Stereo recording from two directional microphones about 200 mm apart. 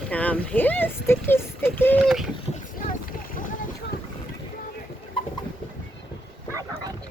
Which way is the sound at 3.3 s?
40° left (ahead or behind).